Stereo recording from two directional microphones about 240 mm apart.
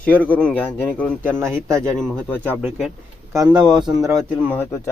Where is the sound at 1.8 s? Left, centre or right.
Centre.